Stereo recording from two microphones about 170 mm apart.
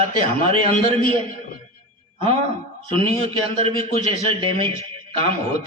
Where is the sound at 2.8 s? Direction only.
35° right (ahead or behind).